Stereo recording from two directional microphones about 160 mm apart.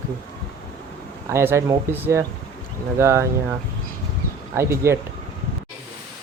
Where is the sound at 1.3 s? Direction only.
15° right (ahead or behind).